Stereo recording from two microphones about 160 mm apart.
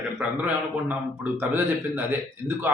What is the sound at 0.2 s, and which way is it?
Speech, 10° right (ahead or behind).